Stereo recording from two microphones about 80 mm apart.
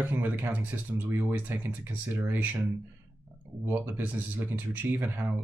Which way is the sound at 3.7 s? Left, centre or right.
Right.